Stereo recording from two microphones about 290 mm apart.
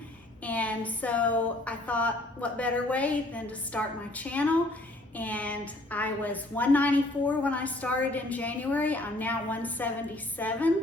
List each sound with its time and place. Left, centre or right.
0.4 s a woman's voice: centre